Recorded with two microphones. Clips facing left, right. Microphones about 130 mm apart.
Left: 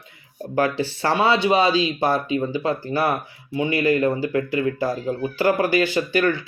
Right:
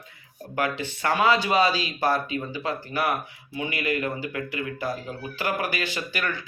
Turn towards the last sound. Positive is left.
turn(degrees=30)  # may be behind; listen again after turning